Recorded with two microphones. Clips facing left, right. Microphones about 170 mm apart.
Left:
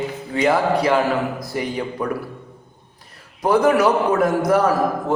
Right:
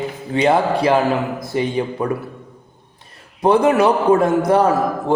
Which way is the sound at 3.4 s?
25° right (ahead or behind).